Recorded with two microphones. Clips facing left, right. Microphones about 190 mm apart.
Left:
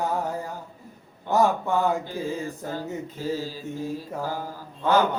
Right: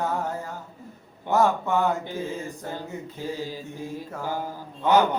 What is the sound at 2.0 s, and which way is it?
Mantra, 20° right (ahead or behind).